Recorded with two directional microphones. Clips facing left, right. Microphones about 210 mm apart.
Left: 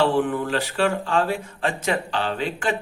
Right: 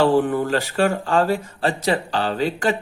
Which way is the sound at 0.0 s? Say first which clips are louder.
Right 3 dB; 40° right (ahead or behind).